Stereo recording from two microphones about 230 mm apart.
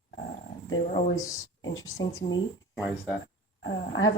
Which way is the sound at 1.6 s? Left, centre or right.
Left.